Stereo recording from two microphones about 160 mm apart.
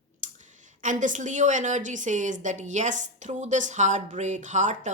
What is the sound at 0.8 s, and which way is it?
A woman's voice, 50° right (ahead or behind).